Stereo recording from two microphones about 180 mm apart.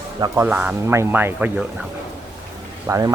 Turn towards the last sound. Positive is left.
turn(degrees=-15)  # may be behind; listen again after turning